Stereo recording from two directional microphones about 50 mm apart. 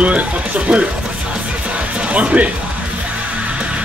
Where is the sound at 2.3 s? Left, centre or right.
Right.